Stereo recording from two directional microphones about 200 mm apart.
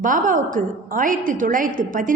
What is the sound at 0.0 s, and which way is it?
A woman's voice, 40° right (ahead or behind).